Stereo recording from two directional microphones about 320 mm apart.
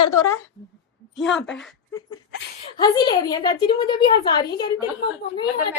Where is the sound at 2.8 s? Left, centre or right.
Centre.